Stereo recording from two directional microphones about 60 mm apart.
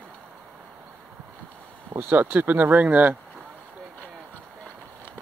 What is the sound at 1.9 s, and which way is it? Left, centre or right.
Speech, right.